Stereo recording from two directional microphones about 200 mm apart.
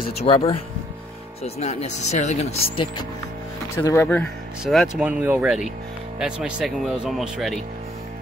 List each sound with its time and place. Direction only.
0.2 s speech: 30° left (ahead or behind)
3.7 s speech: 15° left (ahead or behind)
4.9 s speech: 5° right (ahead or behind)